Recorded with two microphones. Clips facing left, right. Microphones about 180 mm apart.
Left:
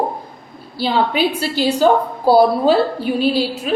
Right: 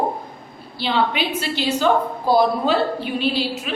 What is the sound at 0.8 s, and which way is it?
A woman's voice, 40° left (ahead or behind).